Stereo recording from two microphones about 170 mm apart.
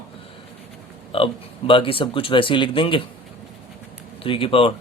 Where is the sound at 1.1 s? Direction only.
30° left (ahead or behind).